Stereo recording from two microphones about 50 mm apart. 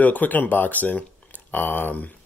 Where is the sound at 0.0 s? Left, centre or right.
Left.